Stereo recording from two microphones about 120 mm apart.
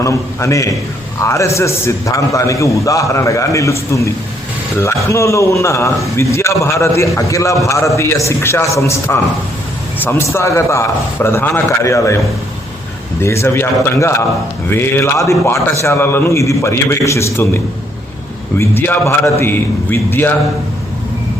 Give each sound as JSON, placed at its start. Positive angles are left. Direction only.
{"t": 0.0, "sound": "a man's voice", "side_deg": 25}
{"t": 13.2, "sound": "a man's voice", "side_deg": 20}